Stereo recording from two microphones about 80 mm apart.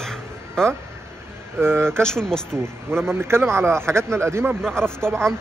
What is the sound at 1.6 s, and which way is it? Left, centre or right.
Speech, right.